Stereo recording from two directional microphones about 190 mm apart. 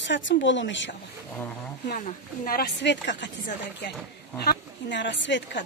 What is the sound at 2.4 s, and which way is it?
Speech, 55° left (ahead or behind).